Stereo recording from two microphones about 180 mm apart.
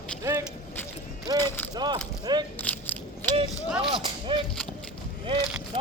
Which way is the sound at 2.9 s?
10° left (ahead or behind).